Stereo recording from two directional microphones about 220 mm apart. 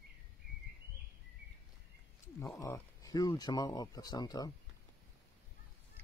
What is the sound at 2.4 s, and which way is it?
Speech, 10° left (ahead or behind).